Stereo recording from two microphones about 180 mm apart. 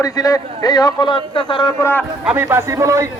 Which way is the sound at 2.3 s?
10° right (ahead or behind).